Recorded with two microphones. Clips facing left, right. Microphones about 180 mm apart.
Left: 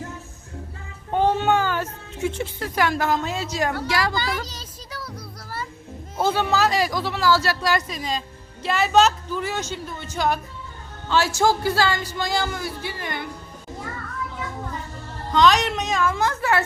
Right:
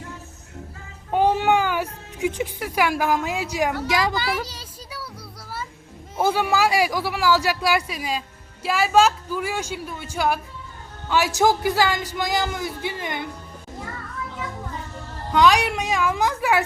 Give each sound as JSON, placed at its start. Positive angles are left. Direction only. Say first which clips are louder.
{"t": 1.1, "sound": "a sound", "louder": "right 1 dB", "side_deg": -15}
{"t": 6.1, "sound": "speech", "louder": "right 1 dB", "side_deg": -10}
{"t": 15.3, "sound": "speech", "louder": "even", "side_deg": -10}